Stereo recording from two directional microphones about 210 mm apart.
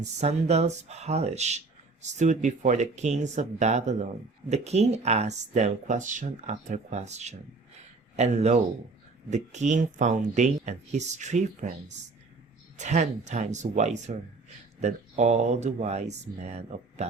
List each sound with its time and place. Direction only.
0.0 s speech: 30° right (ahead or behind)